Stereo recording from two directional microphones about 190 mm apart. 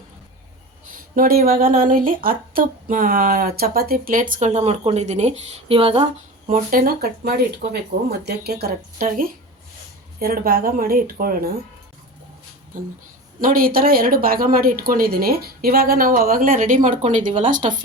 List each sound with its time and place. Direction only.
0.9 s speech: 45° right (ahead or behind); by 6.1 s 30° right (ahead or behind)
6.5 s speech: 50° right (ahead or behind)
12.7 s speech: 45° right (ahead or behind)